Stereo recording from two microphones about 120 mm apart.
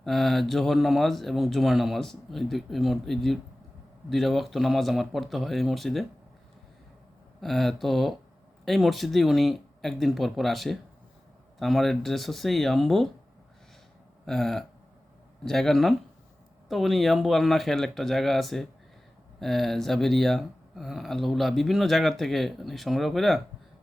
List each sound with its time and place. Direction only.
0.0 s speech: centre (ahead or behind)
7.4 s speech: centre (ahead or behind)
14.3 s speech: 5° left (ahead or behind)